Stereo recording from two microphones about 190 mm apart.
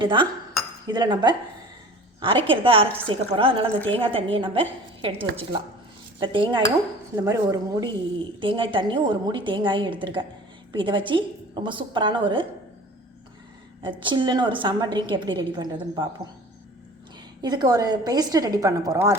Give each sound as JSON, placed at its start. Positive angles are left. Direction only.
{"t": 0.0, "sound": "a woman's voice", "side_deg": -25}
{"t": 2.5, "sound": "a woman's voice", "side_deg": -30}
{"t": 6.1, "sound": "a woman's voice", "side_deg": -25}
{"t": 13.8, "sound": "a woman's voice", "side_deg": -25}
{"t": 17.4, "sound": "a woman's voice", "side_deg": -20}